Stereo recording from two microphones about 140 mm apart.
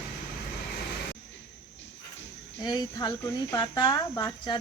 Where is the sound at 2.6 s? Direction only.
30° left (ahead or behind).